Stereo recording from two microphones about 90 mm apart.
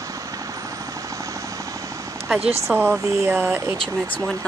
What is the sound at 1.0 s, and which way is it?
Helicopter, 35° right (ahead or behind).